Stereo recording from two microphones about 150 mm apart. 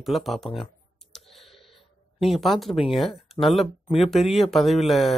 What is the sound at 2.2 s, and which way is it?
Speech, centre (ahead or behind).